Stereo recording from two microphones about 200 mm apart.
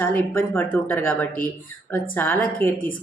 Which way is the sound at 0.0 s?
10° left (ahead or behind).